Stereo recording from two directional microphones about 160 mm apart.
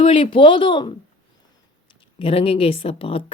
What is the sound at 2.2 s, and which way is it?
Speech, 35° left (ahead or behind).